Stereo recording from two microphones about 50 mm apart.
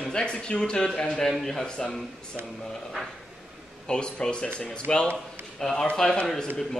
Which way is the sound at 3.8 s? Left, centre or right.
Centre.